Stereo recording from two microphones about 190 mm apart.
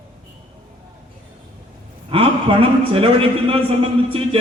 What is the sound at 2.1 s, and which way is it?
A man's voice, 30° right (ahead or behind).